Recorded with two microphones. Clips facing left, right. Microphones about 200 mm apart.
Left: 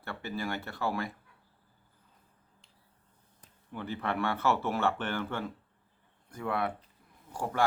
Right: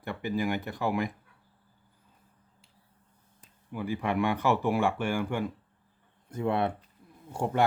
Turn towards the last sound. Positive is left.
turn(degrees=-20)  # may be behind; listen again after turning